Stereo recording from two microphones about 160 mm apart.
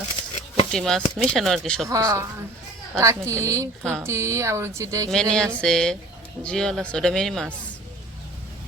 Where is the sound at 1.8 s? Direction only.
20° right (ahead or behind).